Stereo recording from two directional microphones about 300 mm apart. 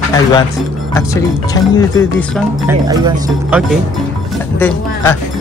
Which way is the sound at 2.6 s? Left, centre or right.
Centre.